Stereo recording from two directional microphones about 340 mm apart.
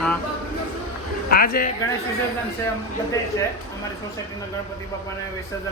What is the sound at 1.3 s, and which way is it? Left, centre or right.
Speech, left.